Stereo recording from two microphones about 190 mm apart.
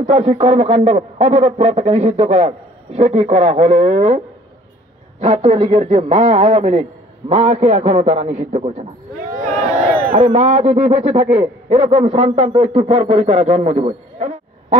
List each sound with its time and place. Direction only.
0.0 s a man's voice: 30° right (ahead or behind)
5.2 s a man's voice: 30° right (ahead or behind)
10.1 s a man's voice: 35° right (ahead or behind)